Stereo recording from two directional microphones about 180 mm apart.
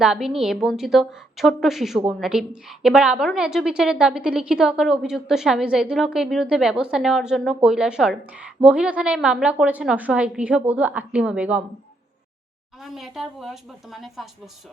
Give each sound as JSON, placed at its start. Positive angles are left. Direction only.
{"t": 0.0, "sound": "a woman's voice", "side_deg": -5}
{"t": 12.8, "sound": "a woman's voice", "side_deg": 0}